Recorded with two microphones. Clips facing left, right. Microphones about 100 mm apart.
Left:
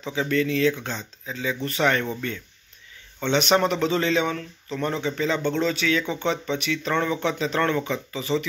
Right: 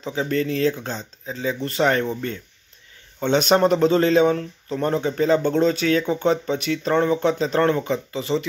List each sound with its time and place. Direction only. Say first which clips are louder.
0.0 s speech: right 1 dB; 35° right (ahead or behind)
3.2 s speech: right 3 dB; 40° right (ahead or behind)